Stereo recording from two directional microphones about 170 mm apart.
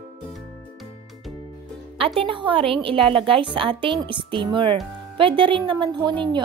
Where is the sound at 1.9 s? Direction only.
35° right (ahead or behind).